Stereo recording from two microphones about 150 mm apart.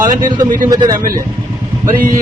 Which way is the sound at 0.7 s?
25° right (ahead or behind).